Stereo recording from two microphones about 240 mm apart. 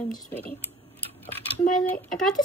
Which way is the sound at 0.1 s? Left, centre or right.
Centre.